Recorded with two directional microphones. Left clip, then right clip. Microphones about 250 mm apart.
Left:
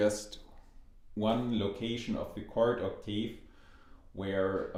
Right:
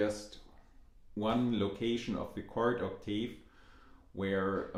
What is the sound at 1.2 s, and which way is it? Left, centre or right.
Speech, centre.